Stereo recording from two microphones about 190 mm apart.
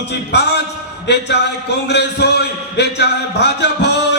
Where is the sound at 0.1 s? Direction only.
60° left (ahead or behind).